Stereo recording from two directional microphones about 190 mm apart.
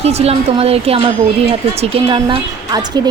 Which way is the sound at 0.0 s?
35° right (ahead or behind).